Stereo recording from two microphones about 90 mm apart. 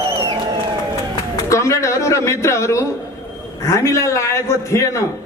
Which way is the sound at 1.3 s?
35° left (ahead or behind).